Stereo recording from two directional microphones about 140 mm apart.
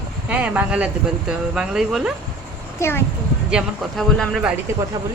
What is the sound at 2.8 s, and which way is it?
Speech, 15° left (ahead or behind).